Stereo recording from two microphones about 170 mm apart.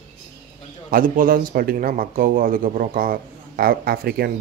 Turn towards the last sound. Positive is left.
turn(degrees=-65)  # may be behind; listen again after turning